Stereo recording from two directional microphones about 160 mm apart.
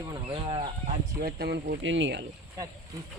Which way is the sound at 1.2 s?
90° right.